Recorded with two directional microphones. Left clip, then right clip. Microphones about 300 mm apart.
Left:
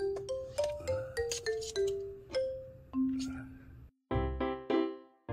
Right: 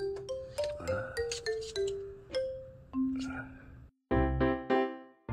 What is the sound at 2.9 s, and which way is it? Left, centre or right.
Music, centre.